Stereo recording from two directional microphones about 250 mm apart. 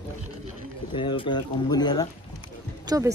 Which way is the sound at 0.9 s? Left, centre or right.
Centre.